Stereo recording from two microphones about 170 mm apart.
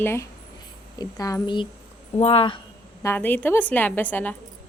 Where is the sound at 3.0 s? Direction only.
10° left (ahead or behind).